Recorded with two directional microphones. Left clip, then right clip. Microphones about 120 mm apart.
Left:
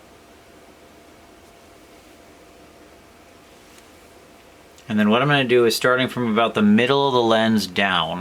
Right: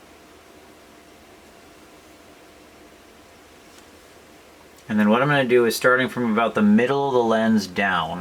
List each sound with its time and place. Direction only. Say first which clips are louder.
4.9 s speech: left 1 dB; 30° left (ahead or behind)